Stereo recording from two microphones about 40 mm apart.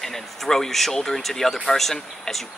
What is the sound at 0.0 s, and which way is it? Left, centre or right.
A man's voice, centre.